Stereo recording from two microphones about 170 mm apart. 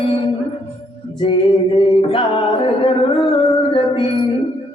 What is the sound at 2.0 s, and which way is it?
Music, 30° left (ahead or behind).